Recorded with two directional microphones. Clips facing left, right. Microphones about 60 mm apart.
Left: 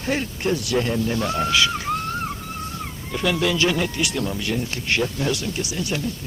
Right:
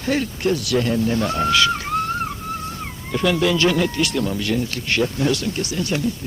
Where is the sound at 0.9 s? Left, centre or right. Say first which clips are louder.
Right 3 dB; right.